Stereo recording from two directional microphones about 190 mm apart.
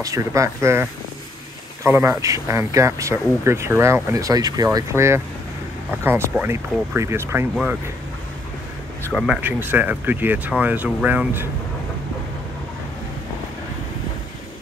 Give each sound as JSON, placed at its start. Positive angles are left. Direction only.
{"t": 0.0, "sound": "speech", "side_deg": -15}
{"t": 9.1, "sound": "speech", "side_deg": -5}